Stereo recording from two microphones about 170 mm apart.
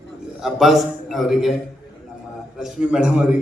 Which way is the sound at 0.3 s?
Centre (ahead or behind).